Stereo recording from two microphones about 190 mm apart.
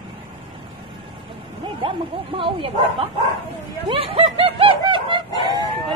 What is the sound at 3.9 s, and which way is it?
Chicken, 30° right (ahead or behind).